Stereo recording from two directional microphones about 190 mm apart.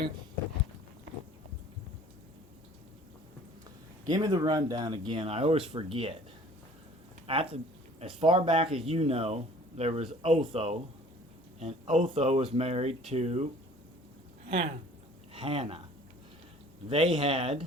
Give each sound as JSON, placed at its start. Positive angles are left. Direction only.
{"t": 4.0, "sound": "speech", "side_deg": -20}
{"t": 7.3, "sound": "speech", "side_deg": -30}
{"t": 15.3, "sound": "speech", "side_deg": -30}
{"t": 16.9, "sound": "speech", "side_deg": -30}